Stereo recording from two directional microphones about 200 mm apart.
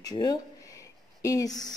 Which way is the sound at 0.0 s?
20° left (ahead or behind).